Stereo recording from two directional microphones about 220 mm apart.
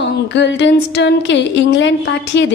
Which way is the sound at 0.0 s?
55° left (ahead or behind).